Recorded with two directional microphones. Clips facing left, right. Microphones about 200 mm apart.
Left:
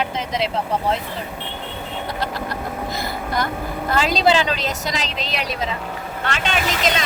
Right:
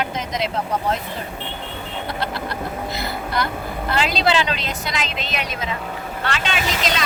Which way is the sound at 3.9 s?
40° left (ahead or behind).